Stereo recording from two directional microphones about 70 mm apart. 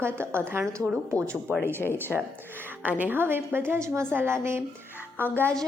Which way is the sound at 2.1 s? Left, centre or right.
Centre.